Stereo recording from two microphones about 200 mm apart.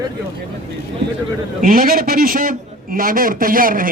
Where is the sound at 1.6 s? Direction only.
45° right (ahead or behind).